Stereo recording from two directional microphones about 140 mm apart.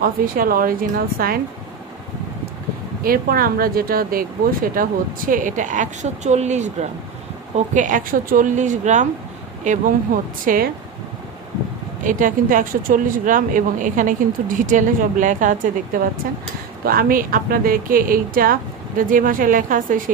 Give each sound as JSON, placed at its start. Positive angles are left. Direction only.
{"t": 0.0, "sound": "a woman's voice", "side_deg": -90}
{"t": 3.0, "sound": "speech", "side_deg": -90}
{"t": 10.4, "sound": "a woman's voice", "side_deg": -90}
{"t": 12.0, "sound": "speech", "side_deg": -70}
{"t": 16.8, "sound": "a woman's voice", "side_deg": -90}